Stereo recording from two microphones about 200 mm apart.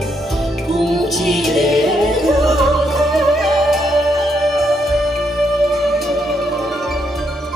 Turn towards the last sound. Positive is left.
turn(degrees=0)  # may be behind; listen again after turning